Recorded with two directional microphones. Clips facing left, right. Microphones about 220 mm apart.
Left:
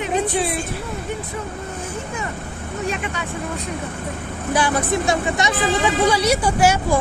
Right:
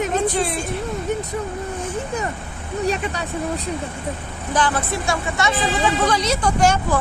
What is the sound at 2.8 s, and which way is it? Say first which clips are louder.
Speech: right 3 dB; 35° right (ahead or behind).